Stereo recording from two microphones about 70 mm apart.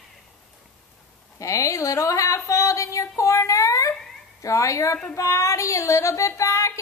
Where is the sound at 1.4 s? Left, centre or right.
Left.